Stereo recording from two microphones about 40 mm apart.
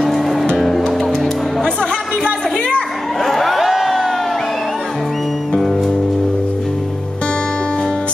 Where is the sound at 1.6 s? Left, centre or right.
Left.